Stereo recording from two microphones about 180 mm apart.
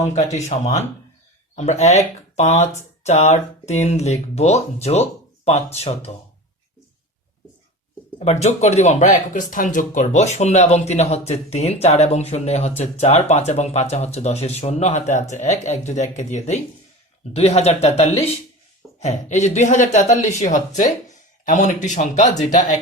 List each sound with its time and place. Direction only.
0.0 s speech: 40° left (ahead or behind)
8.2 s speech: 40° left (ahead or behind)